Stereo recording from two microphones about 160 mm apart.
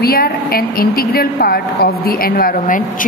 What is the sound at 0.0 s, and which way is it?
A woman's voice, 70° left (ahead or behind).